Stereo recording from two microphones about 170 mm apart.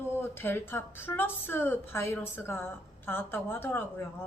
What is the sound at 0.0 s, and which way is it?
A woman's voice, 15° left (ahead or behind).